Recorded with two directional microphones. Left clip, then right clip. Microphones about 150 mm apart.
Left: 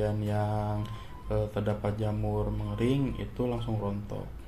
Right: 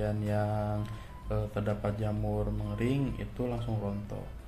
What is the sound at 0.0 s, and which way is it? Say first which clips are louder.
Speech: left 1 dB; 15° left (ahead or behind).